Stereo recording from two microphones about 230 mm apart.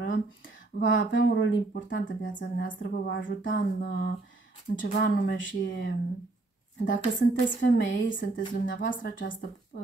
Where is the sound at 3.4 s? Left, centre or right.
Left.